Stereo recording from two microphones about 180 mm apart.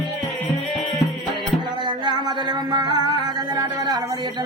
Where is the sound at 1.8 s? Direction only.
25° right (ahead or behind).